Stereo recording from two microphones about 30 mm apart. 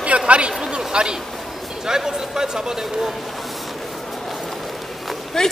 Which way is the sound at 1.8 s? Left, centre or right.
Right.